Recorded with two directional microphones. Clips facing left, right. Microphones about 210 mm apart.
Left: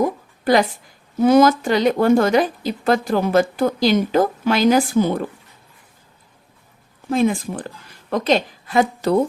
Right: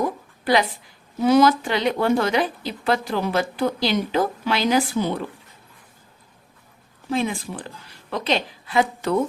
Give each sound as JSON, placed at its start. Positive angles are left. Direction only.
{"t": 0.0, "sound": "a sound", "side_deg": 45}
{"t": 1.2, "sound": "speech", "side_deg": 45}
{"t": 7.1, "sound": "speech", "side_deg": 45}